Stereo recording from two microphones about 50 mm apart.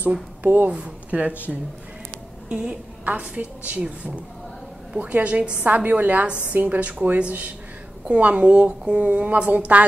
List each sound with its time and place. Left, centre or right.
0.4 s a woman's voice: right
3.1 s a woman's voice: right